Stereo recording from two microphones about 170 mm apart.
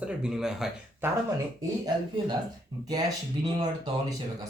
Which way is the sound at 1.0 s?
15° right (ahead or behind).